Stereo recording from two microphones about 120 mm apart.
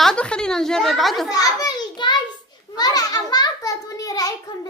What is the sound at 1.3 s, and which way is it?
A child's voice, 30° left (ahead or behind).